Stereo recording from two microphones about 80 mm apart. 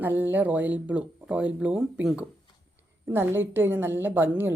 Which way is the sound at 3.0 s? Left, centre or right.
Right.